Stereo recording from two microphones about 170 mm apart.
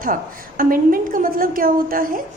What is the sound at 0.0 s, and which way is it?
A woman's voice, 55° right (ahead or behind).